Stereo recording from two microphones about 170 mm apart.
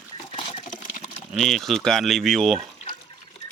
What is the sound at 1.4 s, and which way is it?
Speech, centre (ahead or behind).